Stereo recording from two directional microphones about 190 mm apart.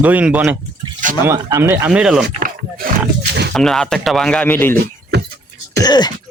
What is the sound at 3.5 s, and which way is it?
A man's voice, 5° left (ahead or behind).